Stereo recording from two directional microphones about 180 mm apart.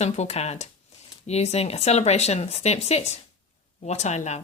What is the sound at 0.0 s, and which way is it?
Speech, 40° left (ahead or behind).